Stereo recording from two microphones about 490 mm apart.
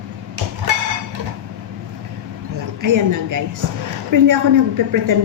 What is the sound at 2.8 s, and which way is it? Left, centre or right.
A woman's voice, right.